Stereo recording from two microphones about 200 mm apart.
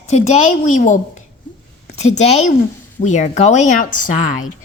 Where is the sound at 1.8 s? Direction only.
35° left (ahead or behind).